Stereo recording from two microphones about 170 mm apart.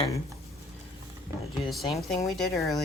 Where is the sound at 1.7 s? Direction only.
Centre (ahead or behind).